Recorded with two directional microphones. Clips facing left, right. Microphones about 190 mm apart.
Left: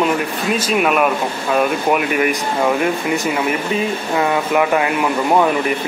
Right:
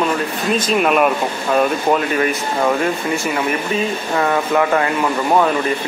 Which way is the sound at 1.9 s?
15° left (ahead or behind).